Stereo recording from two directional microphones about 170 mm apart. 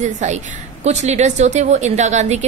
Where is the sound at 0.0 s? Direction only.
45° right (ahead or behind).